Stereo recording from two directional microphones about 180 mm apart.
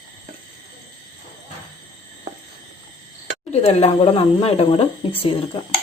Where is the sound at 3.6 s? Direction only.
35° left (ahead or behind).